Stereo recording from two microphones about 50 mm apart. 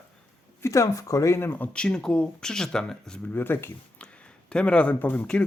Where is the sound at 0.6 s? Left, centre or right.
Left.